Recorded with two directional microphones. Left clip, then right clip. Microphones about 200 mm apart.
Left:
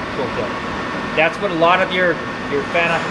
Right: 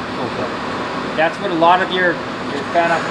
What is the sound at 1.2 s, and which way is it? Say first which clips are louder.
Speech: even; 30° left (ahead or behind).